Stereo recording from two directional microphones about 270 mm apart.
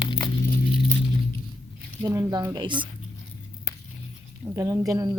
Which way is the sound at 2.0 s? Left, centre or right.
Centre.